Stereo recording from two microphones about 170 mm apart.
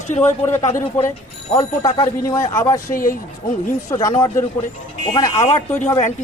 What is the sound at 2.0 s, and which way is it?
Speech, 20° left (ahead or behind).